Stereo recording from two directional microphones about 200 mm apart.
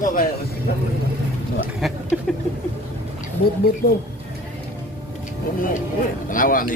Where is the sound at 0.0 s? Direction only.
45° left (ahead or behind).